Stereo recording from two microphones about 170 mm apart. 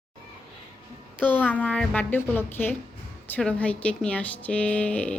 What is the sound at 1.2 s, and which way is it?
Speech, 10° left (ahead or behind).